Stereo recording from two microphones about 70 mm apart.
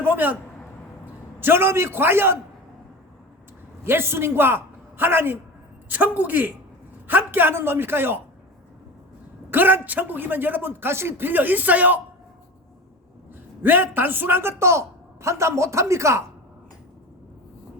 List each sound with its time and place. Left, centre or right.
0.0 s a sound: right
1.4 s a man's voice: right
3.8 s a man's voice: right
9.5 s a man's voice: right
13.6 s a man's voice: right